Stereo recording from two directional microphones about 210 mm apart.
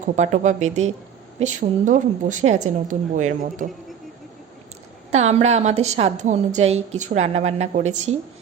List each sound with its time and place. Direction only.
0.0 s a woman's voice: 35° right (ahead or behind)
5.1 s a woman's voice: 30° right (ahead or behind)